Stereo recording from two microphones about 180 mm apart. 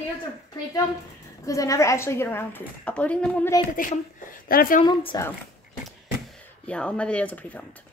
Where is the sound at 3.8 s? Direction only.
50° left (ahead or behind).